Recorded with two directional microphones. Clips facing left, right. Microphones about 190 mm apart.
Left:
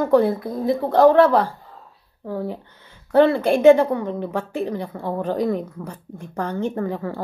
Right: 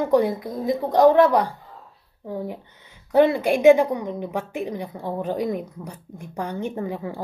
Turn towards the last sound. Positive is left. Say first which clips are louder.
# left 3 dB
turn(degrees=-15)  # may be behind; listen again after turning